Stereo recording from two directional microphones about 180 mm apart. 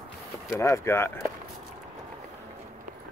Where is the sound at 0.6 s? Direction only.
15° left (ahead or behind).